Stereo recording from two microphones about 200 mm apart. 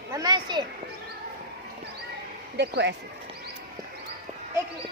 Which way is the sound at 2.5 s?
60° right (ahead or behind).